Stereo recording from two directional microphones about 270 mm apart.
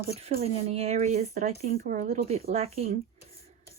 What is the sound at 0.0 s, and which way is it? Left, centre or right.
Speech, right.